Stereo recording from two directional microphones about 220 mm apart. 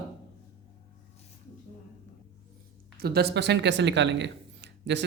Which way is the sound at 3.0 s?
45° right (ahead or behind).